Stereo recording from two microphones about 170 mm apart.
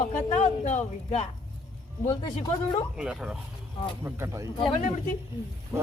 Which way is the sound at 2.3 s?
35° left (ahead or behind).